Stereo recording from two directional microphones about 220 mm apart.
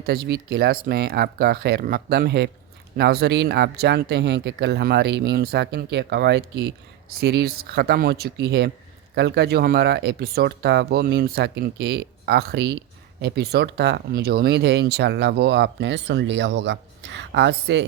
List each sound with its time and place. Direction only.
0.0 s speech: 45° right (ahead or behind)